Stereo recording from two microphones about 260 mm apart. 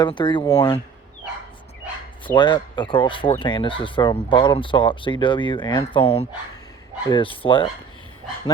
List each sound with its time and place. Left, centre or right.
0.0 s speech: centre
2.2 s speech: centre